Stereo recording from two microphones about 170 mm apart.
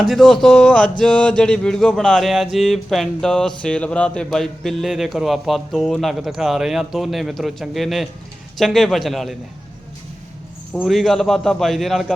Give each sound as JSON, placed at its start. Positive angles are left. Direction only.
{"t": 0.0, "sound": "speech", "side_deg": 0}
{"t": 10.8, "sound": "speech", "side_deg": 0}